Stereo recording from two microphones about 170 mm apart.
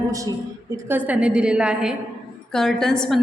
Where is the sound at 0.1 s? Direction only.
20° right (ahead or behind).